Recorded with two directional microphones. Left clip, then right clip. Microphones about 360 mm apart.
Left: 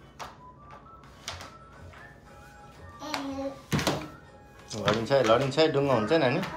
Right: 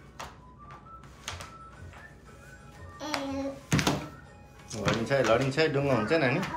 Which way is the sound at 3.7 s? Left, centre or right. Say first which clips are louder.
Right 1 dB; left.